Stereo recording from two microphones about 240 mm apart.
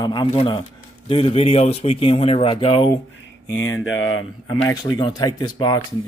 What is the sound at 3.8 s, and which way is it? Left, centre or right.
Speech, left.